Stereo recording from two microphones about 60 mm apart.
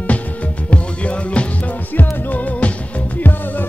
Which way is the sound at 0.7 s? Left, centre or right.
Left.